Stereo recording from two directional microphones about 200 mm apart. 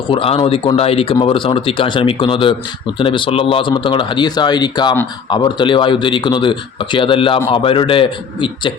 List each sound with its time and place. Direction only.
0.1 s speech: 25° left (ahead or behind)